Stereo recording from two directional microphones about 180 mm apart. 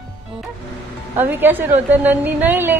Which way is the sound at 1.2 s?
10° right (ahead or behind).